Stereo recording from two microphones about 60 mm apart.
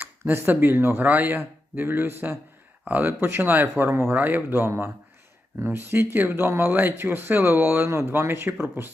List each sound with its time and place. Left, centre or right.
0.0 s speech: right
1.0 s speech: right
7.9 s speech: right